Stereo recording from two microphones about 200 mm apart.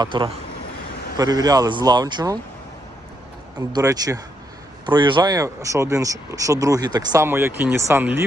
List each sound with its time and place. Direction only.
0.0 s a man's voice: 25° right (ahead or behind)
3.6 s speech: 20° right (ahead or behind)